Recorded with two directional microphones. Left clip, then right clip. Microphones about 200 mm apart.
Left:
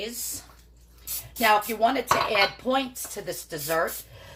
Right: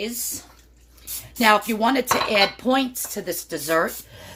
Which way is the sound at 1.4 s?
55° right (ahead or behind).